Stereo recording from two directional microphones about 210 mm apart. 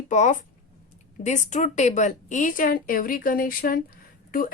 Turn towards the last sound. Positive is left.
turn(degrees=45)  # may be behind; listen again after turning